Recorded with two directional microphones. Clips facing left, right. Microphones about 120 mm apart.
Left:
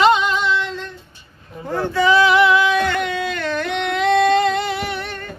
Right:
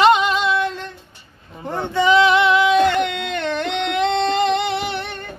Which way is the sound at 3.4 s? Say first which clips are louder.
Even; 25° right (ahead or behind).